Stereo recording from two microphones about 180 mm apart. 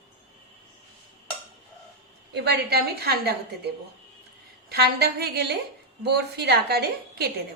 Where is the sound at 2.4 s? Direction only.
65° right (ahead or behind).